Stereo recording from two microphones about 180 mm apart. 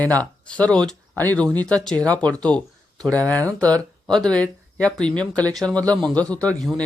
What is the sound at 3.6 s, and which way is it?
Speech, 10° left (ahead or behind).